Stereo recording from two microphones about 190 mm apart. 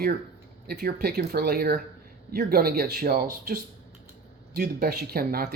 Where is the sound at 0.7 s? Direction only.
55° right (ahead or behind).